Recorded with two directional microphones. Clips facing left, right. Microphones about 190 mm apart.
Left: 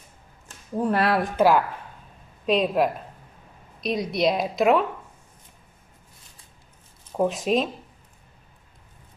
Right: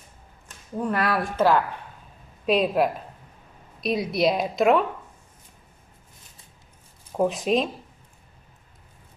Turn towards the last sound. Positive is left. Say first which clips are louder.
# even
turn(degrees=0)  # may be behind; listen again after turning